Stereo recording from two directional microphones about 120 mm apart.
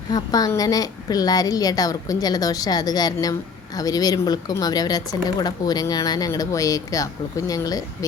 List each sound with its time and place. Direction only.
0.1 s speech: 30° left (ahead or behind)